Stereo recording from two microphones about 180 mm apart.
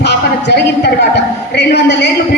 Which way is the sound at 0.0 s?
70° left (ahead or behind).